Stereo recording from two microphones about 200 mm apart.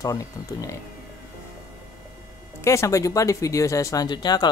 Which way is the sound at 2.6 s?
15° left (ahead or behind).